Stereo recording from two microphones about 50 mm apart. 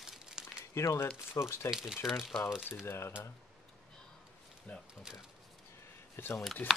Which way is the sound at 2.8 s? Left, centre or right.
Left.